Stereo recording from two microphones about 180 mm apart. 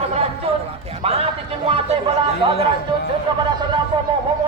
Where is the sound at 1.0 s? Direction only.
35° right (ahead or behind).